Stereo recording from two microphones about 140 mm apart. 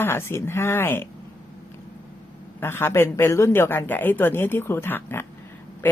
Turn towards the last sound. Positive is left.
turn(degrees=15)  # may be behind; listen again after turning